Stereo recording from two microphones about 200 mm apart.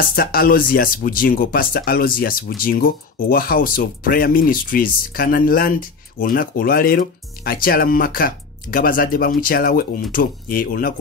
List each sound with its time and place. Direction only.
0.1 s speech: 50° left (ahead or behind)